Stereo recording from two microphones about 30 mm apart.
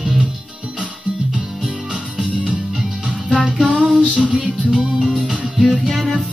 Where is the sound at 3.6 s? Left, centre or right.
Right.